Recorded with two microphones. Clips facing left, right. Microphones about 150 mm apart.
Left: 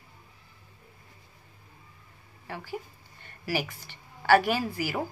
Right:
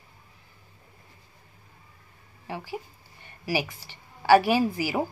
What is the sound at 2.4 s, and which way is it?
Speech, 15° right (ahead or behind).